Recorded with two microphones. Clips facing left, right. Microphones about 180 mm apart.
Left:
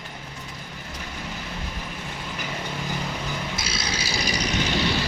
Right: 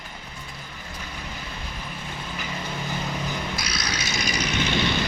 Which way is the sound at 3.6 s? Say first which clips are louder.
Left 1 dB; 25° left (ahead or behind).